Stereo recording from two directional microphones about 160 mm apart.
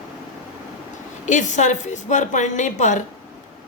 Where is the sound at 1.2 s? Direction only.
50° left (ahead or behind).